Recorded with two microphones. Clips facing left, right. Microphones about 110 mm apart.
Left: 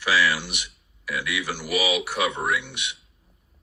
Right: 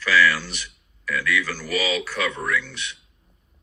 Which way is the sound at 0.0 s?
15° left (ahead or behind).